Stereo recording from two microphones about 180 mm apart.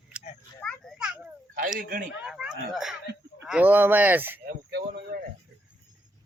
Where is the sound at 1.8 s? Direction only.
55° right (ahead or behind).